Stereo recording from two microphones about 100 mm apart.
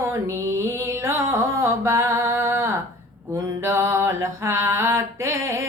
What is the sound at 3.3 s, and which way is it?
Mantra, 30° right (ahead or behind).